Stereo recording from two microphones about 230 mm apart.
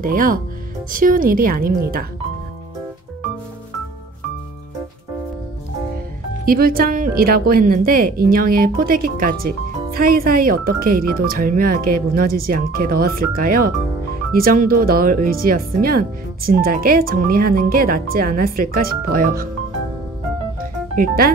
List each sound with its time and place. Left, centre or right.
0.0 s speech: right
6.4 s speech: right
20.9 s speech: right